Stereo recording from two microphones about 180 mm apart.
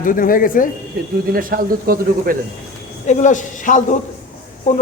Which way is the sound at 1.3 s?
50° right (ahead or behind).